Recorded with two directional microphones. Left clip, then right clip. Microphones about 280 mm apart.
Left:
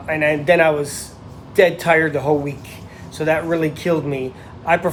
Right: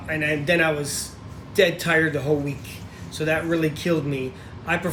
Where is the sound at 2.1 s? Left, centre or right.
Centre.